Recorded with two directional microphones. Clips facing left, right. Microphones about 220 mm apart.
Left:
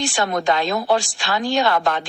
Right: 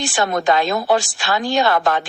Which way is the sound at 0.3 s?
45° right (ahead or behind).